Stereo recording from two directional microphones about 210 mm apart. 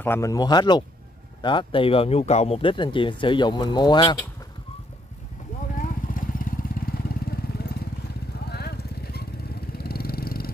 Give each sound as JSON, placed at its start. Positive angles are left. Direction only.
{"t": 0.0, "sound": "speech", "side_deg": 10}
{"t": 5.8, "sound": "vehicle", "side_deg": 40}